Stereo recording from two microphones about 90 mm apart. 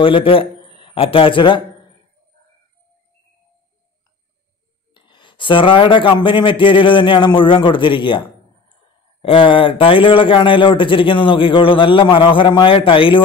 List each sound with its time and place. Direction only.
0.0 s speech: 80° left; by 1.6 s 65° left (ahead or behind)
4.9 s a man's voice: 60° left (ahead or behind)
9.2 s a man's voice: 80° left